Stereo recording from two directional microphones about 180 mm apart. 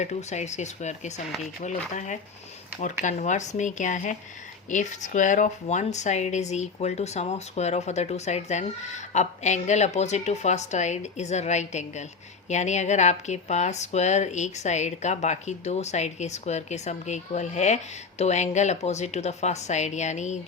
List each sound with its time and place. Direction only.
0.0 s speech: 40° left (ahead or behind)